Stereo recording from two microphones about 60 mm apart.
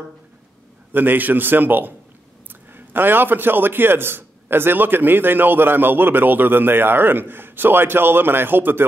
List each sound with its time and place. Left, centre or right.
0.9 s a man's voice: right